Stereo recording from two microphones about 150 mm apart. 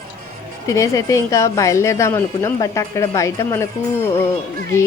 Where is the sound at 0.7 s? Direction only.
20° left (ahead or behind).